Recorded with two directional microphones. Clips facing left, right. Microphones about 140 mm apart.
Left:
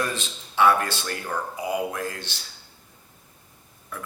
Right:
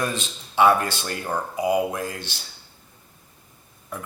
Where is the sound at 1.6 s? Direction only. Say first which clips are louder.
Right 6 dB; 15° right (ahead or behind).